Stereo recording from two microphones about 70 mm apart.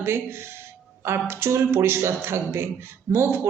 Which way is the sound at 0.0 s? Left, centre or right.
Right.